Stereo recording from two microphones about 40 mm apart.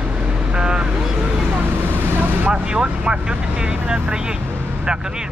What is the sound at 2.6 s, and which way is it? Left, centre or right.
Speech, right.